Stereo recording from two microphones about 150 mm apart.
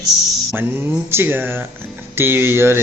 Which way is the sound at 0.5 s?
15° right (ahead or behind).